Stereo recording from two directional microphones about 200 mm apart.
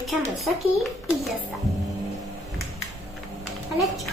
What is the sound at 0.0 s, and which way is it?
Speech, centre (ahead or behind).